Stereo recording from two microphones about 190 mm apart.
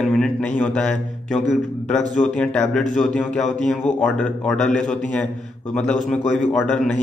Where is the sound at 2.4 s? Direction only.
5° left (ahead or behind).